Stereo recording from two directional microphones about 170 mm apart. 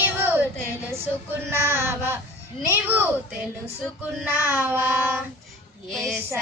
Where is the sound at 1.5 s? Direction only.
15° right (ahead or behind).